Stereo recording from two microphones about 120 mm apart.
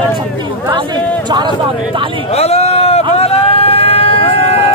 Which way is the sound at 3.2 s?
55° left (ahead or behind).